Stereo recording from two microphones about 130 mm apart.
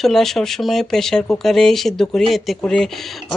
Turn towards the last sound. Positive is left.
turn(degrees=5)  # may be behind; listen again after turning